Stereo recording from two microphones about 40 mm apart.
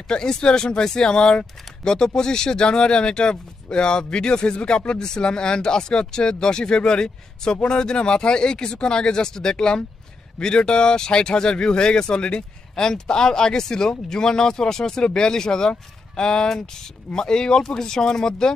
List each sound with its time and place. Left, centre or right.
0.1 s speech: centre